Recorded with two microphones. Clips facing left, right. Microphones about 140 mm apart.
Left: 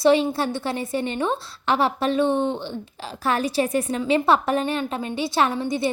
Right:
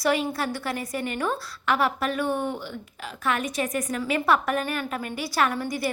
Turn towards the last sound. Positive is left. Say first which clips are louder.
# left 3 dB
turn(degrees=25)  # may be behind; listen again after turning